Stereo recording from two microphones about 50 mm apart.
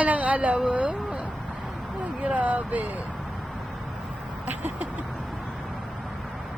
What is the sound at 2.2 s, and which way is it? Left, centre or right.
Vehicle, right.